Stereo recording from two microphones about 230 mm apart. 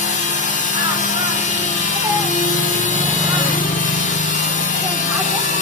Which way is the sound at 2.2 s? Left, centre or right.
Left.